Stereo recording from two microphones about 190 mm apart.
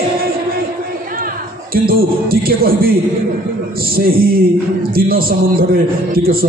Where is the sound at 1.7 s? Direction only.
50° right (ahead or behind).